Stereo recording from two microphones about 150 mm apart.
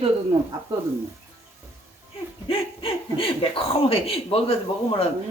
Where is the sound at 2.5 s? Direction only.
40° left (ahead or behind).